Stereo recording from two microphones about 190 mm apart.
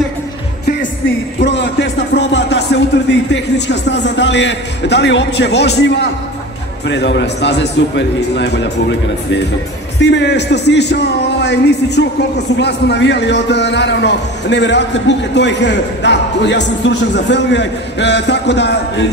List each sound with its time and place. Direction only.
1.4 s music: 70° left (ahead or behind)
6.9 s a man's voice: 70° left (ahead or behind)
9.9 s a man's voice: 65° left (ahead or behind)